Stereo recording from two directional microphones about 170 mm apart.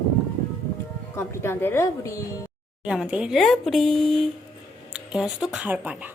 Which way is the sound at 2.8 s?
5° right (ahead or behind).